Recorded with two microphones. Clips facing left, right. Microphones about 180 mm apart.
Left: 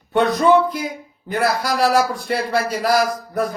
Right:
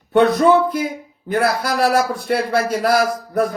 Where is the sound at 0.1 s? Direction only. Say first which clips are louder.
Right 2 dB; 55° right (ahead or behind).